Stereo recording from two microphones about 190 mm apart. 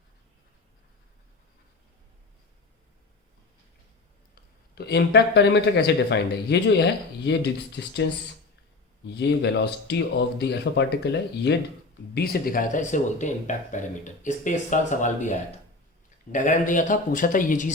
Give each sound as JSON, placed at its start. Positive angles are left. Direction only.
{"t": 4.7, "sound": "speech", "side_deg": 60}
{"t": 9.1, "sound": "speech", "side_deg": 65}